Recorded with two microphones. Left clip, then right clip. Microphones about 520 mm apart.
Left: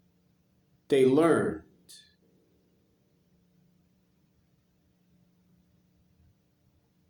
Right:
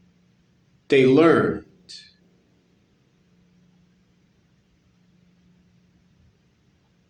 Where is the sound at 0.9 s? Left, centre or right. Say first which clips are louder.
Right 7 dB; left.